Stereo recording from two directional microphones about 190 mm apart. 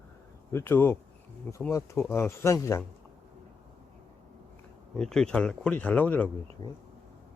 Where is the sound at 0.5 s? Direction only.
10° left (ahead or behind).